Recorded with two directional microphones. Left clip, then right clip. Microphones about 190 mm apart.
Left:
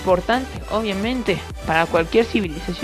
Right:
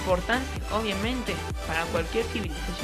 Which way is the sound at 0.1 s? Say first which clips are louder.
Left 8 dB; 45° left (ahead or behind).